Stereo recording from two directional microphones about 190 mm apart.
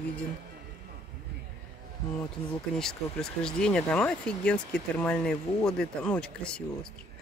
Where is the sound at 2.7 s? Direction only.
5° left (ahead or behind).